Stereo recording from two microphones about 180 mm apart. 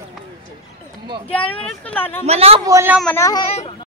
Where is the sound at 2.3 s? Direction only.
35° right (ahead or behind).